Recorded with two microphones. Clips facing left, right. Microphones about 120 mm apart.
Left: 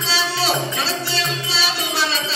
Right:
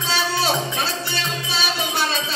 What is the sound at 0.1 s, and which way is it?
Music, 50° right (ahead or behind).